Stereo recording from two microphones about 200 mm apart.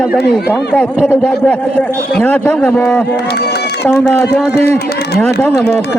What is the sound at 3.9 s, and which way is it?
Speech, 5° left (ahead or behind).